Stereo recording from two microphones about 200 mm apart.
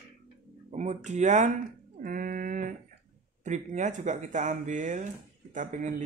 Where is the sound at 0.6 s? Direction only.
35° right (ahead or behind).